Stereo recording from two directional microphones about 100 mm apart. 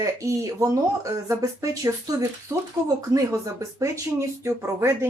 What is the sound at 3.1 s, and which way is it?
Speech, 35° right (ahead or behind).